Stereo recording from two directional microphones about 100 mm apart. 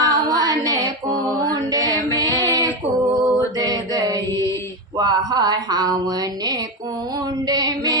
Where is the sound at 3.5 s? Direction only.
40° right (ahead or behind).